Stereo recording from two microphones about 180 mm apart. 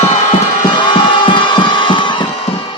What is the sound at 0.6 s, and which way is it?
Music, 25° left (ahead or behind).